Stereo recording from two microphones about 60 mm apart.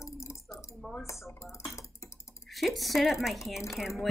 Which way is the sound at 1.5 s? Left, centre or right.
Left.